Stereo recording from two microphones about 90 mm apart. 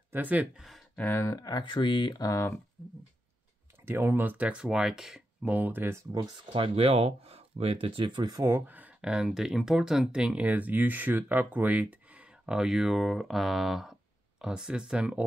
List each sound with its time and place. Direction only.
0.1 s speech: 15° right (ahead or behind)
0.9 s speech: 20° left (ahead or behind)
1.2 s speech: 40° left (ahead or behind)
1.6 s speech: 60° left (ahead or behind); by 2.5 s 35° left (ahead or behind)
3.8 s speech: 25° right (ahead or behind); by 5.5 s 5° right (ahead or behind)
5.5 s speech: 20° right (ahead or behind)
6.5 s speech: 90° right; by 8.5 s 50° right (ahead or behind)
8.5 s speech: 25° right (ahead or behind)
9.1 s speech: 5° right (ahead or behind)